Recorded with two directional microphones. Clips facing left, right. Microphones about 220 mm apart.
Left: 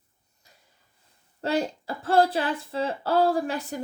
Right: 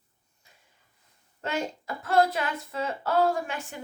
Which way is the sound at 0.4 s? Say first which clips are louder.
Left 2 dB; 40° left (ahead or behind).